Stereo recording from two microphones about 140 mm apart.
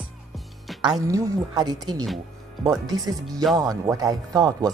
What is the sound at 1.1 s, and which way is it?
Speech, 25° right (ahead or behind).